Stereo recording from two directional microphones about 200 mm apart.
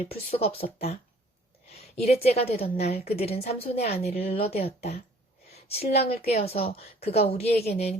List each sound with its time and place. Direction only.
0.3 s a woman's voice: 30° left (ahead or behind)
2.0 s a woman's voice: 30° left (ahead or behind)